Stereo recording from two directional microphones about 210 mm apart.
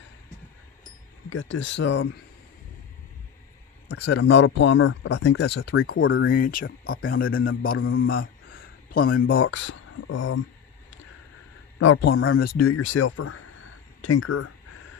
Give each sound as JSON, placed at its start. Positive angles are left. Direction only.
{"t": 1.3, "sound": "speech", "side_deg": 65}
{"t": 3.8, "sound": "a man's voice", "side_deg": 55}
{"t": 4.2, "sound": "a man's voice", "side_deg": 70}
{"t": 6.0, "sound": "speech", "side_deg": 70}
{"t": 6.3, "sound": "a man's voice", "side_deg": 40}
{"t": 7.8, "sound": "speech", "side_deg": 70}
{"t": 8.1, "sound": "speech", "side_deg": 45}
{"t": 11.8, "sound": "speech", "side_deg": 60}
{"t": 12.1, "sound": "speech", "side_deg": 75}
{"t": 12.4, "sound": "a man's voice", "side_deg": 45}
{"t": 12.6, "sound": "speech", "side_deg": 70}